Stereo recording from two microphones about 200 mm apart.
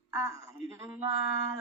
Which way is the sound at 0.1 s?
15° right (ahead or behind).